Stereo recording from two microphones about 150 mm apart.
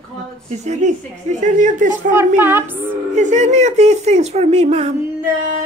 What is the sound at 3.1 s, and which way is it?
Speech, 50° right (ahead or behind).